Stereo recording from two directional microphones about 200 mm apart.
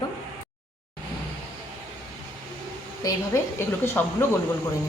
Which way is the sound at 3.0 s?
15° left (ahead or behind).